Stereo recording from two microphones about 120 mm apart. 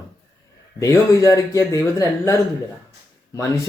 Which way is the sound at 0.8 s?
25° left (ahead or behind).